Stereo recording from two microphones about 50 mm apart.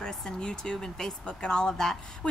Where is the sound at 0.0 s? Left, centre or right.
Centre.